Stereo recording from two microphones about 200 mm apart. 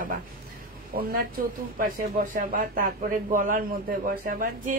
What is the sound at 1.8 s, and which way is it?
A woman's voice, 45° right (ahead or behind).